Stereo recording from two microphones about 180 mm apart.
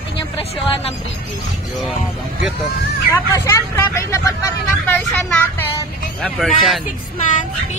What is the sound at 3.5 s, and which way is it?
Speech, 15° left (ahead or behind).